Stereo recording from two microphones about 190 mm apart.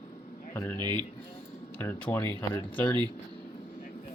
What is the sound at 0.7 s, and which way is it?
Speech, 20° right (ahead or behind).